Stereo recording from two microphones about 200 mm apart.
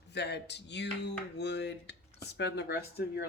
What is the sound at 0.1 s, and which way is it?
Speech, 55° left (ahead or behind).